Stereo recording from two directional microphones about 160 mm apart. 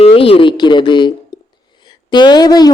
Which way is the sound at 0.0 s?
35° left (ahead or behind).